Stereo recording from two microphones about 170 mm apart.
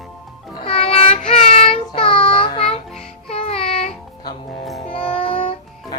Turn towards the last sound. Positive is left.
turn(degrees=30)  # may be behind; listen again after turning